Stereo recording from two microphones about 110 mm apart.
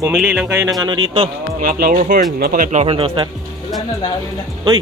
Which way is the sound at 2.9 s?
55° right (ahead or behind).